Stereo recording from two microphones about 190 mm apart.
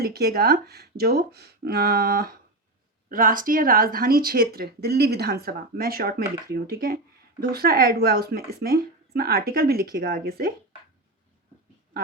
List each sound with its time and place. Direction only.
0.0 s speech: 55° right (ahead or behind)